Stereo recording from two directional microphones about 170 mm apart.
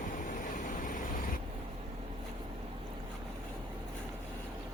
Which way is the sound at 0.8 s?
50° left (ahead or behind).